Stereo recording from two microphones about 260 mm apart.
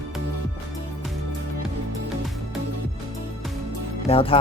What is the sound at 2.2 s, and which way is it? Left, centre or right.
Music, centre.